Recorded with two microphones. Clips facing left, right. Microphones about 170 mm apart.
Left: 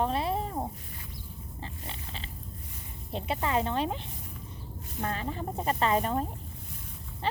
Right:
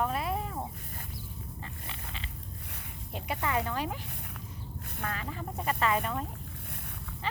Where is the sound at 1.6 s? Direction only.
30° left (ahead or behind).